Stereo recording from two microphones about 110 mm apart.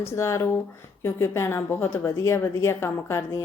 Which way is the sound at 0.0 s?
25° left (ahead or behind).